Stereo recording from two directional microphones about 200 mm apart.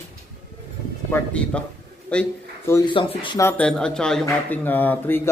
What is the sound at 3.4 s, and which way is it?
Speech, 10° left (ahead or behind).